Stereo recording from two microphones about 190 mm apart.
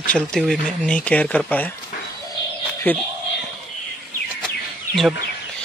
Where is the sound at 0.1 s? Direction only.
5° left (ahead or behind).